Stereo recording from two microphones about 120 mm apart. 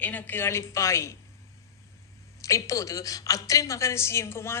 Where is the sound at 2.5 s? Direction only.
25° left (ahead or behind).